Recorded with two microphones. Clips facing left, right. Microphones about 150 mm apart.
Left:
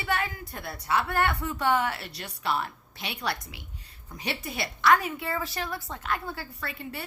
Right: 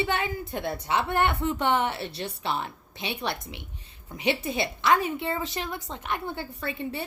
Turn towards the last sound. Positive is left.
turn(degrees=-20)  # may be behind; listen again after turning